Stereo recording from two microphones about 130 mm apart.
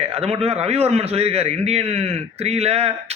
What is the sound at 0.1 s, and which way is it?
Speech, 50° right (ahead or behind).